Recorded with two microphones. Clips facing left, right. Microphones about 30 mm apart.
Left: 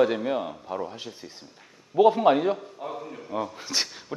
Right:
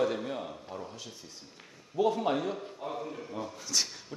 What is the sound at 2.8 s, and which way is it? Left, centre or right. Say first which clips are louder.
Speech: left 2 dB; centre.